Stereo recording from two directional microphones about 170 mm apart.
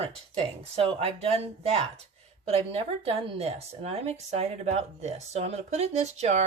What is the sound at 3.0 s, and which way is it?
Speech, 35° right (ahead or behind).